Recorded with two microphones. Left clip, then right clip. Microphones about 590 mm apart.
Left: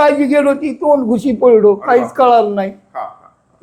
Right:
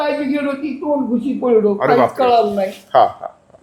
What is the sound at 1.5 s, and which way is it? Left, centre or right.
A man's voice, left.